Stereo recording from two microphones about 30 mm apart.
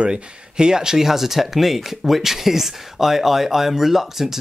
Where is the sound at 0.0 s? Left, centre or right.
Right.